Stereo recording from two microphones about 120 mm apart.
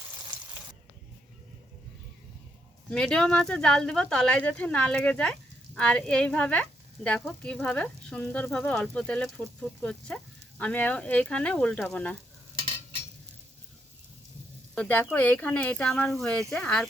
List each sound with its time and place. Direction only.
2.9 s speech: 5° left (ahead or behind)
12.5 s stir: 45° right (ahead or behind)
14.8 s speech: 15° left (ahead or behind)